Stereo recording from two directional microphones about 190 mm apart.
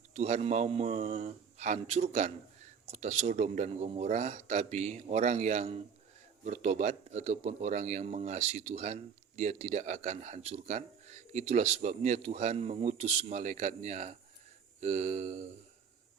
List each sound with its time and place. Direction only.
0.1 s speech: 35° right (ahead or behind)